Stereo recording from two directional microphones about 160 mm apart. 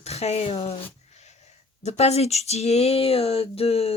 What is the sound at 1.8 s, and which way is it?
Speech, 40° left (ahead or behind).